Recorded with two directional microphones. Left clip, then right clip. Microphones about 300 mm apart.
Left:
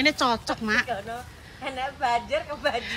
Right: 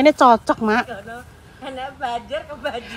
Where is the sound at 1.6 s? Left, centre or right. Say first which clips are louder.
Even; left.